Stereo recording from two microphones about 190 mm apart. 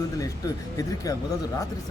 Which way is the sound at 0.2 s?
20° left (ahead or behind).